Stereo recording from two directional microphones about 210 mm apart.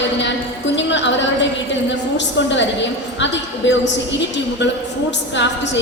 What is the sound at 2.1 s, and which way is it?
A woman's voice, 60° left (ahead or behind).